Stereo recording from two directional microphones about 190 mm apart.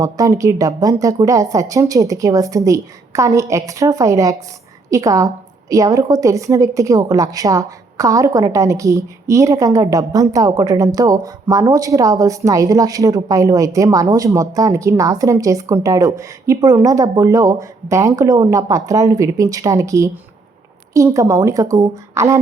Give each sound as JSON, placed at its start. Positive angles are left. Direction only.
{"t": 0.0, "sound": "a woman's voice", "side_deg": -15}